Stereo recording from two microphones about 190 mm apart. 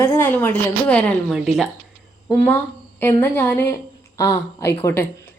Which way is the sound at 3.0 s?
10° left (ahead or behind).